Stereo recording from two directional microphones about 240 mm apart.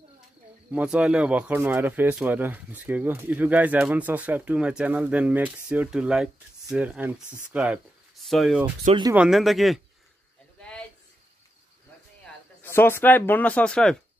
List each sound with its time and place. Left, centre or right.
0.7 s speech: centre
8.8 s speech: centre
9.1 s speech: centre
10.6 s a sound: centre
12.6 s speech: centre